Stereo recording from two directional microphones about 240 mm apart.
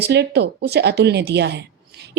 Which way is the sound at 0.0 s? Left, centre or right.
Right.